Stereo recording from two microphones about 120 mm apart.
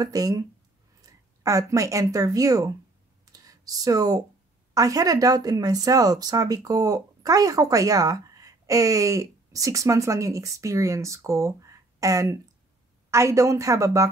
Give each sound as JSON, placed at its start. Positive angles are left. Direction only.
{"t": 0.0, "sound": "speech", "side_deg": -30}
{"t": 3.3, "sound": "a sound", "side_deg": -30}
{"t": 4.7, "sound": "speech", "side_deg": -30}